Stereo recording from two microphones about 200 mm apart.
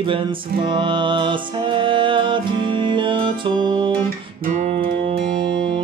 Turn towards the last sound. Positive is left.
turn(degrees=-55)  # may be behind; listen again after turning